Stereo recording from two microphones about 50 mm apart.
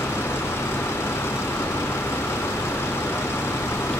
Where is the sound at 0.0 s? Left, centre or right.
Left.